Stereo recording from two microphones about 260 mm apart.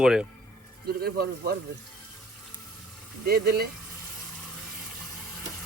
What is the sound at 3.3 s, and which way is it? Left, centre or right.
Speech, right.